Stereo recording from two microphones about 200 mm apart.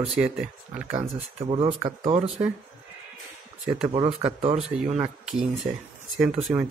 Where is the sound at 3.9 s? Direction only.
25° right (ahead or behind).